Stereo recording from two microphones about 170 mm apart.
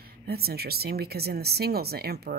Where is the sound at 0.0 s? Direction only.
65° right (ahead or behind).